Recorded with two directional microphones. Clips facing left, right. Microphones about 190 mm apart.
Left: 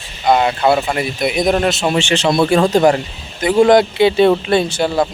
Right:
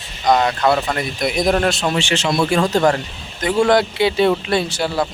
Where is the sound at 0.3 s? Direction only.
10° left (ahead or behind).